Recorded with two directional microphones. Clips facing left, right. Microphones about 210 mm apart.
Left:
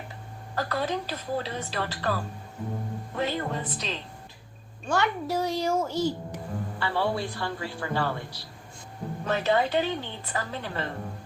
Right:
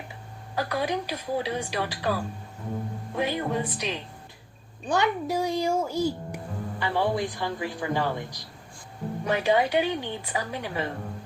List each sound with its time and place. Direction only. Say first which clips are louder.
0.5 s a child's voice: right 1 dB; 10° right (ahead or behind)